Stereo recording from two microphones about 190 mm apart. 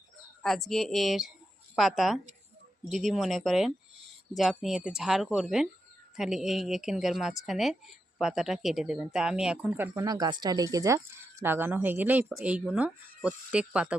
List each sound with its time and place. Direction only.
0.4 s speech: centre (ahead or behind)
10.0 s speech: 20° right (ahead or behind)